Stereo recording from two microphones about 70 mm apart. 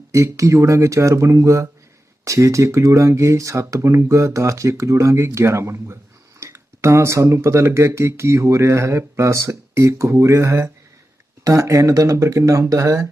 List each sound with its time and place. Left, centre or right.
0.1 s speech: right